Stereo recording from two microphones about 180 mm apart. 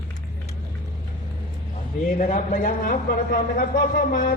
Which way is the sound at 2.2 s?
45° left (ahead or behind).